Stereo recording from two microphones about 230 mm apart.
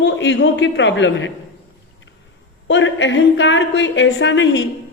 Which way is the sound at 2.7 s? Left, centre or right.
Left.